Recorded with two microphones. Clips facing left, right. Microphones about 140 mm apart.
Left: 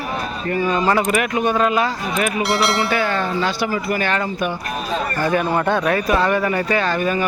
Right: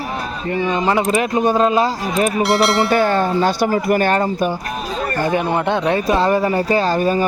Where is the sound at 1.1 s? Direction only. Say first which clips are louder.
Right 3 dB; 30° right (ahead or behind).